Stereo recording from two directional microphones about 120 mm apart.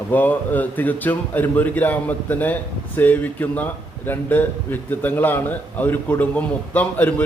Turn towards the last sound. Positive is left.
turn(degrees=15)  # may be behind; listen again after turning